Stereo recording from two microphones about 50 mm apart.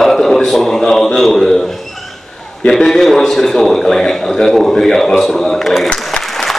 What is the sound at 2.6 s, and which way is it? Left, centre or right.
A man's voice, centre.